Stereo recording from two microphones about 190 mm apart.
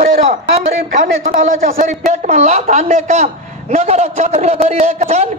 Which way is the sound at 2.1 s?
35° right (ahead or behind).